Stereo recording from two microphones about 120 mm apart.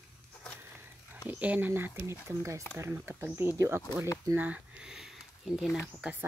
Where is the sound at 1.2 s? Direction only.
10° right (ahead or behind).